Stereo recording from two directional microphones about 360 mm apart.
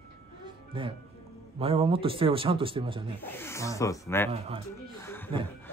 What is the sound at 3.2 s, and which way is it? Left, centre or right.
Speech, centre.